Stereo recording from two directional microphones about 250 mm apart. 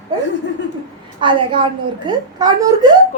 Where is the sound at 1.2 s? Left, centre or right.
Centre.